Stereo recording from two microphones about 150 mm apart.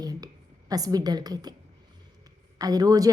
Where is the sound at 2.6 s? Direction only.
25° right (ahead or behind).